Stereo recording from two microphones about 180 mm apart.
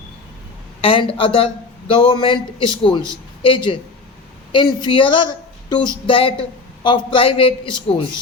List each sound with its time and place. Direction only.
0.8 s a woman's voice: 30° left (ahead or behind)